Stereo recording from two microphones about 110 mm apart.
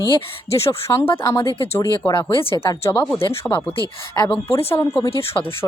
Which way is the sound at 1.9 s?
40° left (ahead or behind).